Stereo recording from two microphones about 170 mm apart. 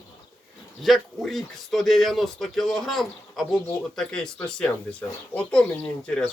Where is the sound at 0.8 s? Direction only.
Centre (ahead or behind).